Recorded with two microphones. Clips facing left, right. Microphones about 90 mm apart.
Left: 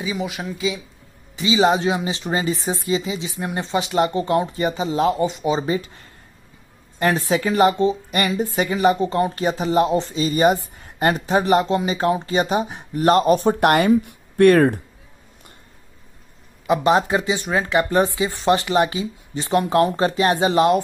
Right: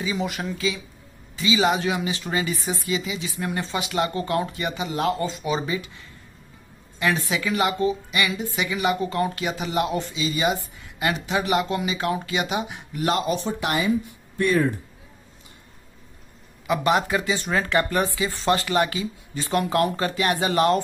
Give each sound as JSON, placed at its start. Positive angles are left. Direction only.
{"t": 0.0, "sound": "speech", "side_deg": 5}
{"t": 0.6, "sound": "speech", "side_deg": 20}
{"t": 5.7, "sound": "speech", "side_deg": 40}
{"t": 10.1, "sound": "speech", "side_deg": 45}
{"t": 16.6, "sound": "speech", "side_deg": 30}